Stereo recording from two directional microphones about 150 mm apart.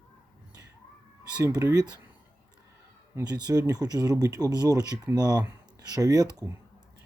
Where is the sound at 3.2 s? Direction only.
25° right (ahead or behind).